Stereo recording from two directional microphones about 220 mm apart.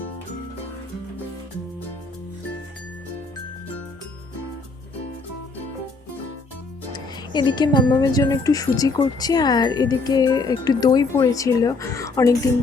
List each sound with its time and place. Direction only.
6.9 s a woman's voice: 20° left (ahead or behind)